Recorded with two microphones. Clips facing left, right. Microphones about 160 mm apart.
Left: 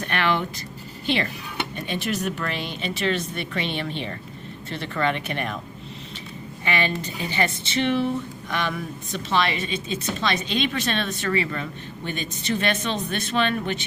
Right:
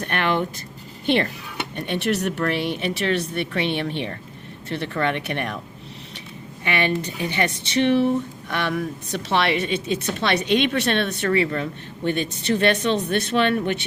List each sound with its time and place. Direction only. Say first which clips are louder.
0.1 s a woman's voice: right 1 dB; 45° right (ahead or behind); by 5.5 s 65° right (ahead or behind)
6.7 s a woman's voice: right 3 dB; 65° right (ahead or behind)